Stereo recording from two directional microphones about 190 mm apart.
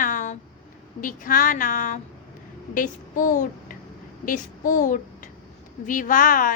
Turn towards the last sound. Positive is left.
turn(degrees=45)  # may be behind; listen again after turning